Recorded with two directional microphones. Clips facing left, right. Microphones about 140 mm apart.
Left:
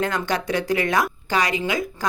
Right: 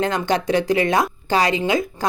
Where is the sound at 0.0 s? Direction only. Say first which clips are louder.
Right 3 dB; 25° right (ahead or behind).